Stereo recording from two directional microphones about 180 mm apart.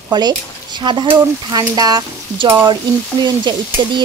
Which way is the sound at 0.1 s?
25° right (ahead or behind).